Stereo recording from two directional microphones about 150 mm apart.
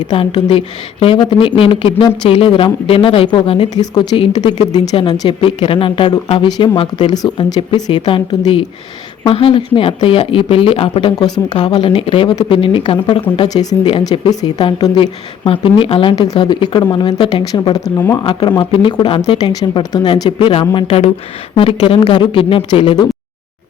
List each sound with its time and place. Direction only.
0.0 s a woman's voice: 30° left (ahead or behind)
3.8 s a woman's voice: 25° left (ahead or behind)
18.3 s a woman's voice: 30° left (ahead or behind)
20.4 s speech: 40° left (ahead or behind)